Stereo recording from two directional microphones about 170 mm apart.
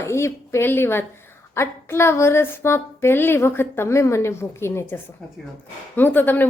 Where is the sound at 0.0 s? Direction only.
15° left (ahead or behind).